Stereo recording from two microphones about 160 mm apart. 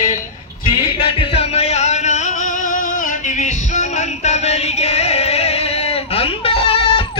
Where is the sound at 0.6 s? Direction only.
35° left (ahead or behind).